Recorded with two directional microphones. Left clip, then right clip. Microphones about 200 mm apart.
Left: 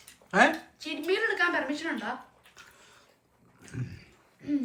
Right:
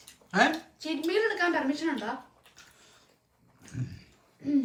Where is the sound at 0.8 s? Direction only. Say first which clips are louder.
Right 2 dB; 45° right (ahead or behind).